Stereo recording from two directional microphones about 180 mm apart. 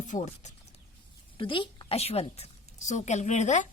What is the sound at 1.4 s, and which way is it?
A woman's voice, 30° left (ahead or behind).